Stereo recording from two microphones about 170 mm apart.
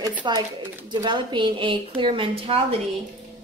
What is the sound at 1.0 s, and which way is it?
A woman's voice, 25° right (ahead or behind).